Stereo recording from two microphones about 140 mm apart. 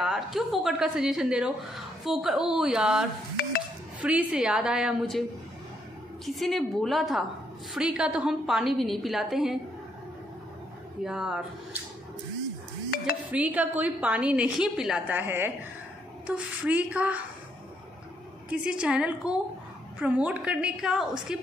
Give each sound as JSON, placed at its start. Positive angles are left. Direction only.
{"t": 0.0, "sound": "a woman's voice", "side_deg": 0}
{"t": 6.2, "sound": "a woman's voice", "side_deg": 0}
{"t": 11.1, "sound": "a woman's voice", "side_deg": -5}
{"t": 12.9, "sound": "music", "side_deg": 90}
{"t": 13.3, "sound": "a woman's voice", "side_deg": -10}
{"t": 18.5, "sound": "a woman's voice", "side_deg": -5}